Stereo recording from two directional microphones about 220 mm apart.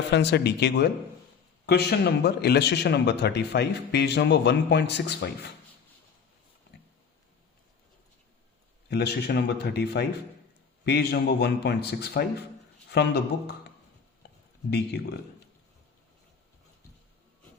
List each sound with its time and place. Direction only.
0.1 s a man's voice: 50° left (ahead or behind)
8.9 s a man's voice: 50° left (ahead or behind)